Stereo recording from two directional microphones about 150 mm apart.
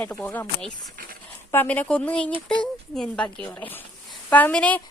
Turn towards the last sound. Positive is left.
turn(degrees=10)  # may be behind; listen again after turning